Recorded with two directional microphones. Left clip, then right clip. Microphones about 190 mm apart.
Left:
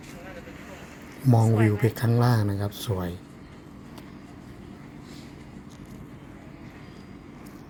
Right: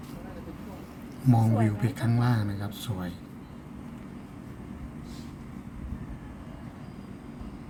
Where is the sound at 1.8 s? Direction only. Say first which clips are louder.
Left 5 dB; 45° left (ahead or behind).